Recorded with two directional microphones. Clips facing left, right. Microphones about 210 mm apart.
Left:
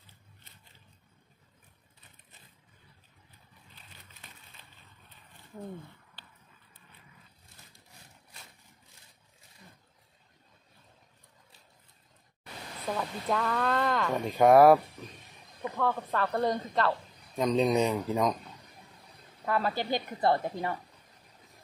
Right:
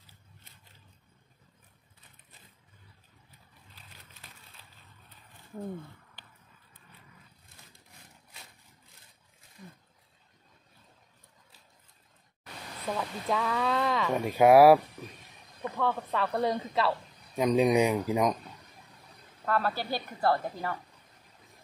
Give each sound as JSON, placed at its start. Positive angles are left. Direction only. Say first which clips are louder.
{"t": 12.8, "sound": "speech", "louder": "even", "side_deg": 0}
{"t": 15.8, "sound": "speech", "louder": "even", "side_deg": 0}
{"t": 19.4, "sound": "a woman's voice", "louder": "even", "side_deg": 15}